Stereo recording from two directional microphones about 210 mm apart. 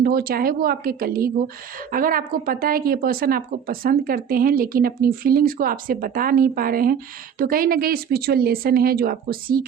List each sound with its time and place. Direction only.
0.0 s speech: 45° right (ahead or behind)